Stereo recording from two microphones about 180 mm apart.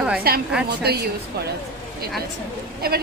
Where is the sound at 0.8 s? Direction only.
60° right (ahead or behind).